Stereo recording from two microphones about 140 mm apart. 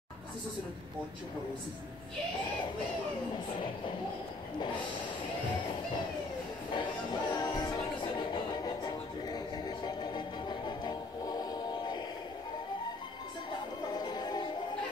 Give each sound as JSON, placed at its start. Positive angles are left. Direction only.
{"t": 6.7, "sound": "music", "side_deg": 35}
{"t": 13.9, "sound": "music", "side_deg": 30}